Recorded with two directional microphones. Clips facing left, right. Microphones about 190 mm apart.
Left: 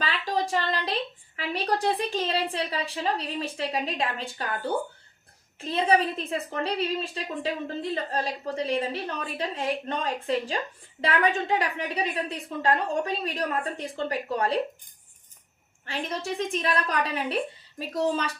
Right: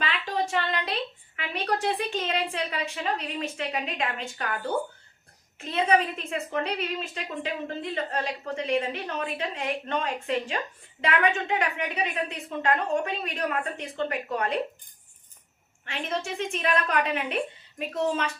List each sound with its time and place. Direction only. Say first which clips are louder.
0.0 s a sound: left 1 dB; 35° left (ahead or behind)
1.4 s a woman's voice: left 1 dB; 35° left (ahead or behind)
5.5 s a woman's voice: even; 35° left (ahead or behind)
15.9 s a woman's voice: even; 35° left (ahead or behind)